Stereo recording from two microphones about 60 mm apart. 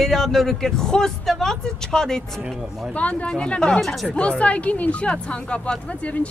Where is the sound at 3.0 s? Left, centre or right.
Left.